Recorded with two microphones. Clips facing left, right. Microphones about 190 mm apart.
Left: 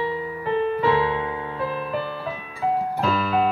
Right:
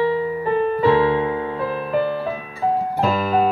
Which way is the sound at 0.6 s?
45° right (ahead or behind).